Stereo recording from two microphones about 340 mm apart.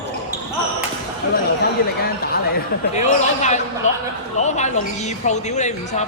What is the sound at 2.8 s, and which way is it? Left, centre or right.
A woman's voice, centre.